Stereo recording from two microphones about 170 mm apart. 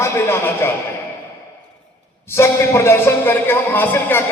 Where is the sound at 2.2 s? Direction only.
15° left (ahead or behind).